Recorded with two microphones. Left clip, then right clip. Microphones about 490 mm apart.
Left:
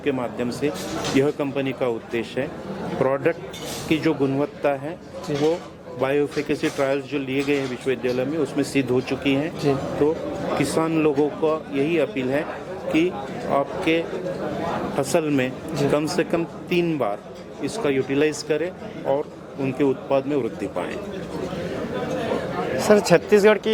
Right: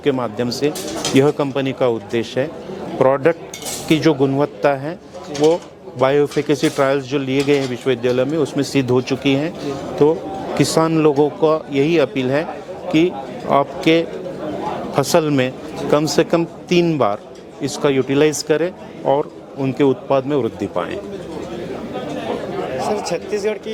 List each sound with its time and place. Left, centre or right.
0.0 s speech: right
6.0 s speech: right
22.8 s speech: left